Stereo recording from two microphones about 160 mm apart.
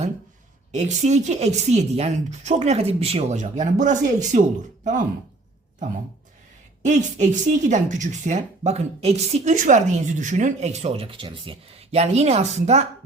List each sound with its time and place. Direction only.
0.7 s speech: 45° right (ahead or behind)
6.8 s speech: 50° right (ahead or behind)